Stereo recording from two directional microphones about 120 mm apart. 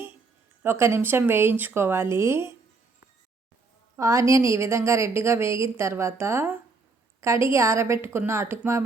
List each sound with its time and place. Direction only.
0.6 s a woman's voice: 20° right (ahead or behind)
3.9 s a woman's voice: 25° right (ahead or behind)